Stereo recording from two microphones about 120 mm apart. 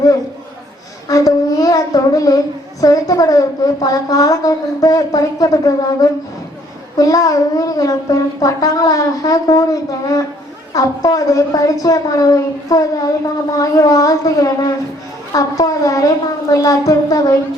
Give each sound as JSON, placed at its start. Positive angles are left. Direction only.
{"t": 1.0, "sound": "child singing", "side_deg": 30}
{"t": 2.8, "sound": "a woman's voice", "side_deg": 30}